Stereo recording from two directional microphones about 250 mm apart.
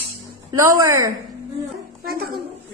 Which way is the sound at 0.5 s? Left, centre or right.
Centre.